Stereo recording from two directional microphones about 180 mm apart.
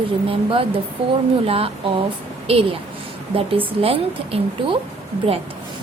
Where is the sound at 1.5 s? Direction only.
30° right (ahead or behind).